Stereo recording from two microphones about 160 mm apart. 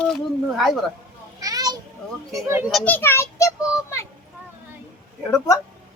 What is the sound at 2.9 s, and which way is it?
A child's voice, 15° left (ahead or behind).